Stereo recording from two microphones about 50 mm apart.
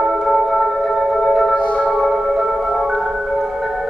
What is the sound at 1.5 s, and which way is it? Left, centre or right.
Music, left.